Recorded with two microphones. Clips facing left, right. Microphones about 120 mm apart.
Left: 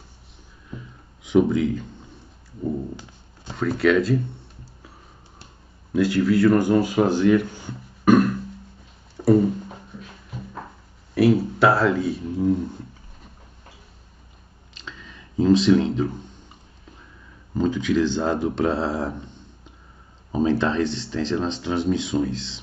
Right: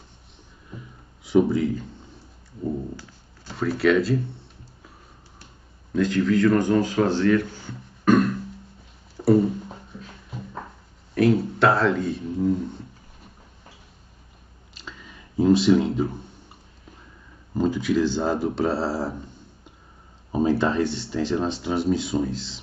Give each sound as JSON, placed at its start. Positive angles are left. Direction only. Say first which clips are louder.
{"t": 1.2, "sound": "speech", "louder": "left 1 dB", "side_deg": 0}
{"t": 3.0, "sound": "a sound", "louder": "left 1 dB", "side_deg": 20}
{"t": 3.5, "sound": "speech", "louder": "left 1 dB", "side_deg": 0}
{"t": 5.9, "sound": "speech", "louder": "left 2 dB", "side_deg": 5}
{"t": 9.1, "sound": "a sound", "louder": "left 1 dB", "side_deg": 0}
{"t": 9.9, "sound": "music", "louder": "left 1 dB", "side_deg": 0}
{"t": 11.1, "sound": "speech", "louder": "left 2 dB", "side_deg": 5}
{"t": 14.7, "sound": "a sound", "louder": "left 1 dB", "side_deg": -5}
{"t": 17.6, "sound": "speech", "louder": "left 1 dB", "side_deg": -10}
{"t": 20.2, "sound": "speech", "louder": "even", "side_deg": -10}